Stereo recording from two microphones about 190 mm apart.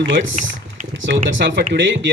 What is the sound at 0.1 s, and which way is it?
Speech, 70° right (ahead or behind).